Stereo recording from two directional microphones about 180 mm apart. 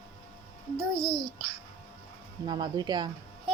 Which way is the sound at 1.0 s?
30° left (ahead or behind).